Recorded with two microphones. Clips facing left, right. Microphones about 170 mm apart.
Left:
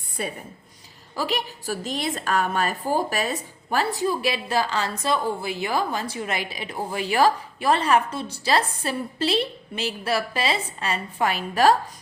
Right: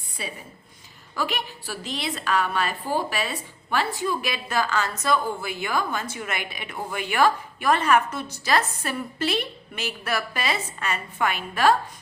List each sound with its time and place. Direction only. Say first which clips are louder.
0.2 s a woman's voice: left 5 dB; 50° left (ahead or behind)
1.1 s a woman's voice: left 2 dB; 35° left (ahead or behind)